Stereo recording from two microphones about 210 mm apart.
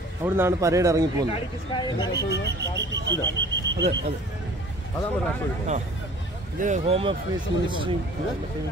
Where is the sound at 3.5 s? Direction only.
55° right (ahead or behind).